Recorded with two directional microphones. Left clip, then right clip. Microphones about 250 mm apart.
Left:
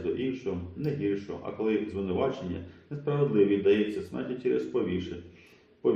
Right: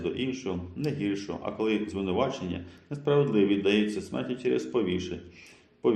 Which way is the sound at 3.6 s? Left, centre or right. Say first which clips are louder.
Left 1 dB; right.